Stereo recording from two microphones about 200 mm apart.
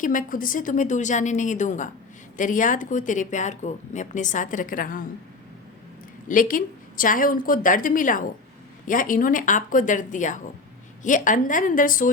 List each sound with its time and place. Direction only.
0.0 s speech: 40° left (ahead or behind)
6.2 s a woman's voice: 40° left (ahead or behind)